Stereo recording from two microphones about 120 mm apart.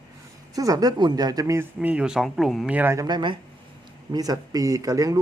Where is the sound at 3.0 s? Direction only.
35° right (ahead or behind).